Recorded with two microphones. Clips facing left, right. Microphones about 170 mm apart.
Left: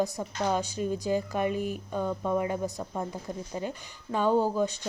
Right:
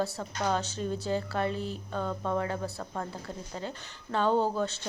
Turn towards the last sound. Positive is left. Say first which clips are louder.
# left 2 dB
turn(degrees=15)  # may be behind; listen again after turning